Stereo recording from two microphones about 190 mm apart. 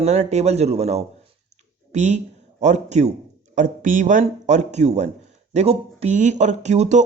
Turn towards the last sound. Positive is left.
turn(degrees=-35)  # may be behind; listen again after turning